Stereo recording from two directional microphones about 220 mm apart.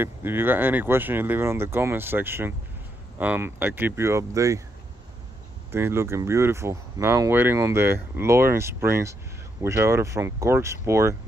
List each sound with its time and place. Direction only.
0.0 s speech: 10° right (ahead or behind)
5.7 s speech: 10° right (ahead or behind)